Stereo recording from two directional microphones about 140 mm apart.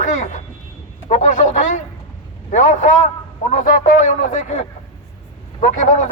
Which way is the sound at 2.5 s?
60° left (ahead or behind).